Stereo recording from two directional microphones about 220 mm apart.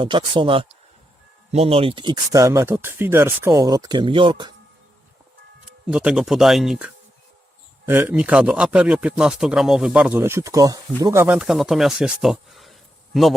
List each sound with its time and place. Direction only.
0.0 s speech: 20° right (ahead or behind)
5.9 s speech: 5° right (ahead or behind)